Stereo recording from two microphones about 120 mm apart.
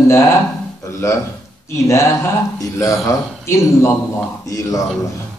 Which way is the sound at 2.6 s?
30° left (ahead or behind).